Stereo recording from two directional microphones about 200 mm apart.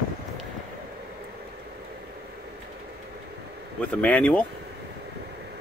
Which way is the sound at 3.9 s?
5° left (ahead or behind).